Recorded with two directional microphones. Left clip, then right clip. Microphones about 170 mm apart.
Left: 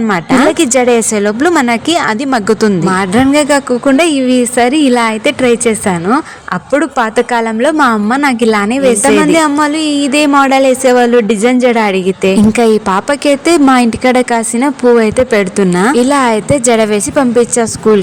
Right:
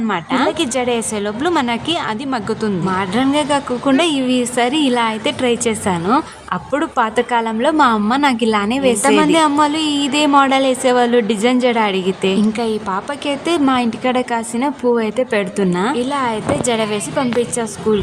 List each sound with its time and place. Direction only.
0.1 s a woman's voice: 35° left (ahead or behind)
12.5 s a woman's voice: 40° left (ahead or behind)